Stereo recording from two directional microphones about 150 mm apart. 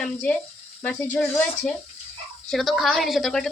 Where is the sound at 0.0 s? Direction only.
10° left (ahead or behind).